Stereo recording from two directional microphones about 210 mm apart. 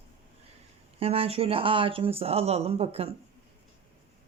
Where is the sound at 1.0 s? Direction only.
30° right (ahead or behind).